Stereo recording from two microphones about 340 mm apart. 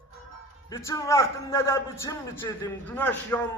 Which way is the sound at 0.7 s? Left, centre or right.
Centre.